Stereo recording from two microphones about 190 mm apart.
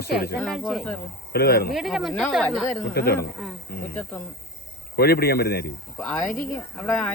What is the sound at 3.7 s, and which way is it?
Snake, 55° left (ahead or behind).